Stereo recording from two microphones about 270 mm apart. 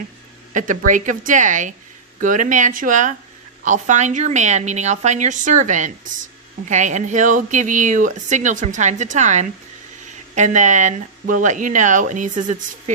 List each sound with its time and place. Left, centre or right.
0.5 s speech: right